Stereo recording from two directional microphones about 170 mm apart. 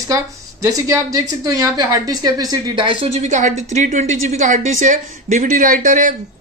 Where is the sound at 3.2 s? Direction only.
45° right (ahead or behind).